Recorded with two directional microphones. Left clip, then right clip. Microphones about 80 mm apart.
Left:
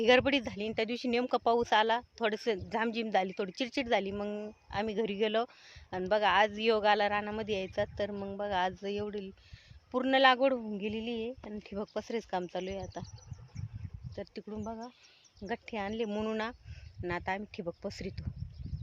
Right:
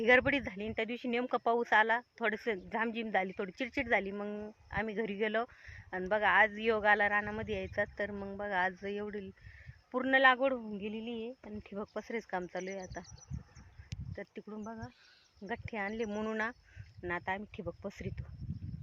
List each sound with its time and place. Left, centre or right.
0.0 s speech: centre; by 1.3 s left
1.3 s speech: centre
2.5 s speech: left
10.7 s speech: left
11.9 s speech: centre
14.2 s speech: centre
15.6 s speech: centre
17.0 s speech: centre